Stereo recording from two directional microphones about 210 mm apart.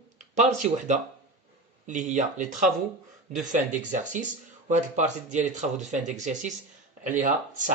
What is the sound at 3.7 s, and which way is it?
Speech, 35° right (ahead or behind).